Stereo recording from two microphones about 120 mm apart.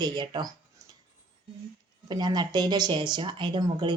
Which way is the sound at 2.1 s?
35° right (ahead or behind).